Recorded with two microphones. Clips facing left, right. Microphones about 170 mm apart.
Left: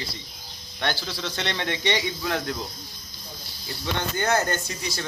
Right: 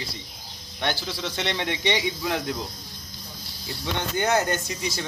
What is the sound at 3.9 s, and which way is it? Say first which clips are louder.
Speech: right 1 dB; 15° right (ahead or behind).